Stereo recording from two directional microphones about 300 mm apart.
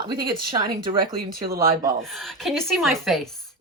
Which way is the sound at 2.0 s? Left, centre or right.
Centre.